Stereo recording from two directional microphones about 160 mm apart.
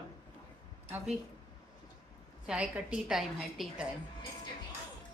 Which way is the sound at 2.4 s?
5° right (ahead or behind).